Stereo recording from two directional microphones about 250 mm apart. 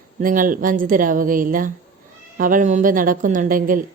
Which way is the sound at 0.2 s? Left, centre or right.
Right.